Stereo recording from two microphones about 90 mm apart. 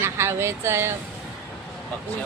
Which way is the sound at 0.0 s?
30° right (ahead or behind).